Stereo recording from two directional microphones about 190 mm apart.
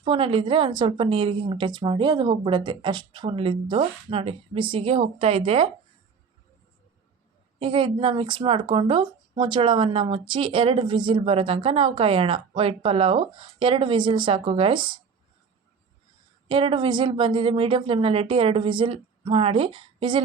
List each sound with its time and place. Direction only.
0.0 s speech: 30° right (ahead or behind)
7.6 s speech: 25° right (ahead or behind)
16.5 s speech: 25° right (ahead or behind)